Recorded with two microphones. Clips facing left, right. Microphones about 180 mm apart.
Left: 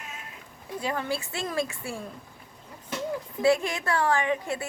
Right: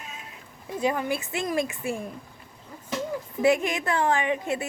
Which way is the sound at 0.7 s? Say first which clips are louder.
Right 4 dB; 15° right (ahead or behind).